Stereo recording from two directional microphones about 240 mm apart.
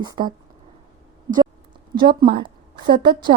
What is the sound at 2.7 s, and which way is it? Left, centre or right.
Speech, right.